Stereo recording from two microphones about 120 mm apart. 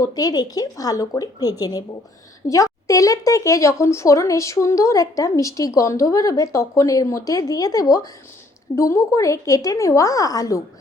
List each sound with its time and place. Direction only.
0.0 s speech: 30° left (ahead or behind)